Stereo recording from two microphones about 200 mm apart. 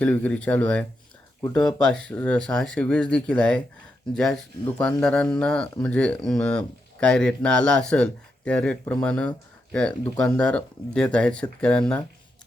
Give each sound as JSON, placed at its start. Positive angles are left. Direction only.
{"t": 0.0, "sound": "speech", "side_deg": 5}